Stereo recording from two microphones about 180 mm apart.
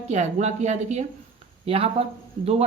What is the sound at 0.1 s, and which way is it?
Speech, 40° right (ahead or behind).